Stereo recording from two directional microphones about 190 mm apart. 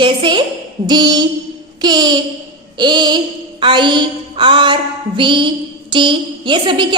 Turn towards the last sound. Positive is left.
turn(degrees=-25)  # may be behind; listen again after turning